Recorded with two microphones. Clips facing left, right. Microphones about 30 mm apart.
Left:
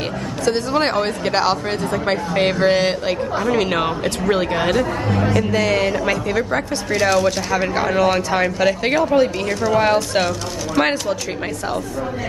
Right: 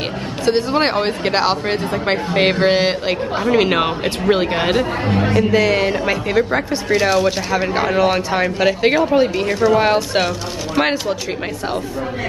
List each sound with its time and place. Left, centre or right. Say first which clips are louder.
0.5 s a man's voice: right 2 dB; right